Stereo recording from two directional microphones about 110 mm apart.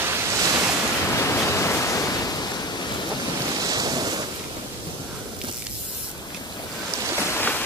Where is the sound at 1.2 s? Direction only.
25° left (ahead or behind).